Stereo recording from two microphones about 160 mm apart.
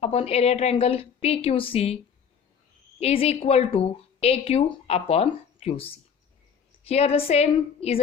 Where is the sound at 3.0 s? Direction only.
40° left (ahead or behind).